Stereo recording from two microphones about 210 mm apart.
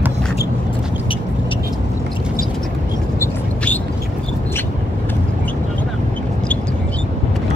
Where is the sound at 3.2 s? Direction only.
5° left (ahead or behind).